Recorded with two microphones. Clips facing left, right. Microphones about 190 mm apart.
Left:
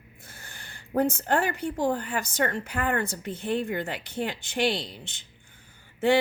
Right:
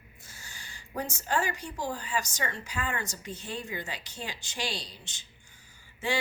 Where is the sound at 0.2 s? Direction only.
55° left (ahead or behind).